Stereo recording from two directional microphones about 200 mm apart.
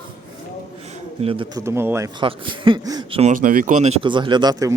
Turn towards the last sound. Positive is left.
turn(degrees=-15)  # may be behind; listen again after turning